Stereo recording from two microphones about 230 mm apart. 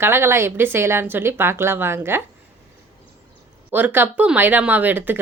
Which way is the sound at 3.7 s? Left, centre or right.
Centre.